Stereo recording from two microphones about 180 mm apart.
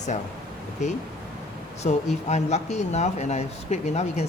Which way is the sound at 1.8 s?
45° left (ahead or behind).